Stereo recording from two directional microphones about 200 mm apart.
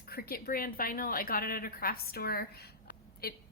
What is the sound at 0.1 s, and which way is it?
A woman's voice, 50° left (ahead or behind).